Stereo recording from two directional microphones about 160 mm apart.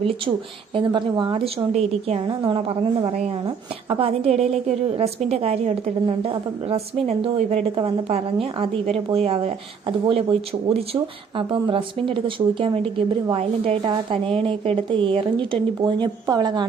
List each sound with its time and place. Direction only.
0.7 s a woman's voice: 30° right (ahead or behind)
1.7 s a woman's voice: 40° right (ahead or behind)
11.3 s a woman's voice: 30° right (ahead or behind)